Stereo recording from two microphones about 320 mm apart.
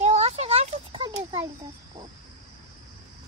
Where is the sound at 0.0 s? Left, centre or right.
Centre.